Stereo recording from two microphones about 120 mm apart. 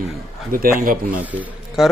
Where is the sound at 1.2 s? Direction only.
15° right (ahead or behind).